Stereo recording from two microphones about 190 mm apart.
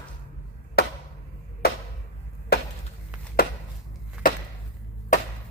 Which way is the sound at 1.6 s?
55° left (ahead or behind).